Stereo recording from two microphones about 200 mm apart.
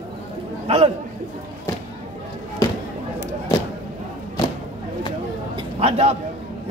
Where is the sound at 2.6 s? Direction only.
15° left (ahead or behind).